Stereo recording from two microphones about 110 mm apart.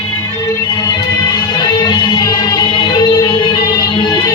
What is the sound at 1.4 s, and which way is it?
Music, 40° left (ahead or behind).